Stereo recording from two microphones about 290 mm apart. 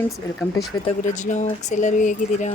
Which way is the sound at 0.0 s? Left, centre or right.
Centre.